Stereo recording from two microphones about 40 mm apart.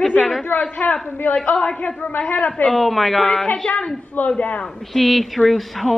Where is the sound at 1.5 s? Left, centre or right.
Left.